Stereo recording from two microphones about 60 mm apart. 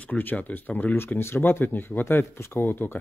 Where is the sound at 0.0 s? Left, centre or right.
Left.